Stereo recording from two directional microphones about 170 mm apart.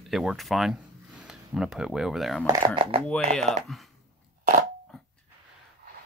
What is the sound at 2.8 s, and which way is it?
Speech, 35° right (ahead or behind).